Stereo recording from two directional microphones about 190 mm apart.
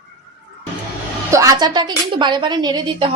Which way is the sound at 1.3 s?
15° right (ahead or behind).